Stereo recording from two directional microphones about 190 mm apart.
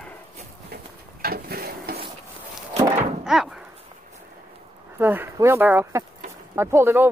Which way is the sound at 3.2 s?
5° right (ahead or behind).